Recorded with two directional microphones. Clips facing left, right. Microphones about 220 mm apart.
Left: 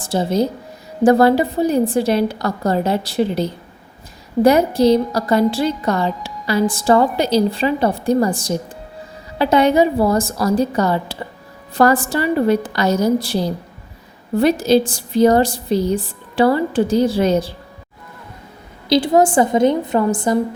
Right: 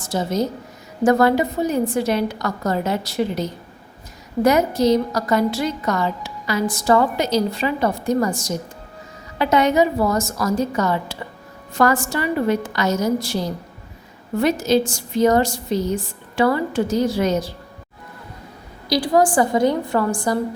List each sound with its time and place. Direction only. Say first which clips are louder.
0.0 s a woman's voice: left 4 dB; 30° left (ahead or behind)
18.9 s a woman's voice: left 3 dB; 25° left (ahead or behind)